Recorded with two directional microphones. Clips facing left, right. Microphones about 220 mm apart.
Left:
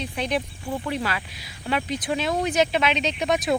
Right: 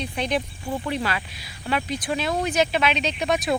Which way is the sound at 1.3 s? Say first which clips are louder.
Even; 20° left (ahead or behind).